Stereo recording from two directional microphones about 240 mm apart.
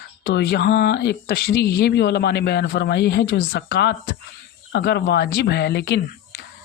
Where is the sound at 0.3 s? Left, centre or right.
Left.